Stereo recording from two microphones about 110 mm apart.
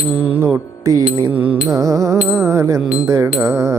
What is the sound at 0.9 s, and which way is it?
Mantra, 35° right (ahead or behind).